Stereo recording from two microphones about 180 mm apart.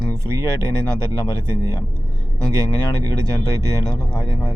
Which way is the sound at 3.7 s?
20° left (ahead or behind).